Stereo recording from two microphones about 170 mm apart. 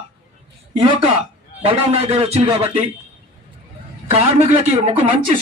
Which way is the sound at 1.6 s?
35° right (ahead or behind).